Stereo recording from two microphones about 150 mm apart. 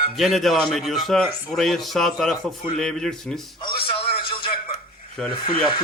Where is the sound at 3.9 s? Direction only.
40° left (ahead or behind).